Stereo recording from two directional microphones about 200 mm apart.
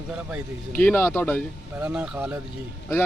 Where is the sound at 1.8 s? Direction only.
5° right (ahead or behind).